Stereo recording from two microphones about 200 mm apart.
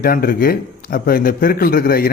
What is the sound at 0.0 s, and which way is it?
Speech, 45° left (ahead or behind).